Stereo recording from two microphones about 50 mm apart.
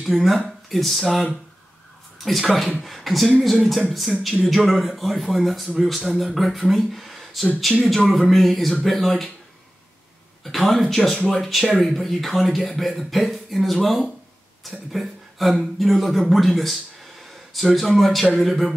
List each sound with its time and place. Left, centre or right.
0.0 s speech: centre
10.4 s speech: centre